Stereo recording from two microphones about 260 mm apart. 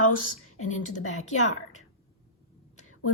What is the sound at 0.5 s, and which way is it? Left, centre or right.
Speech, left.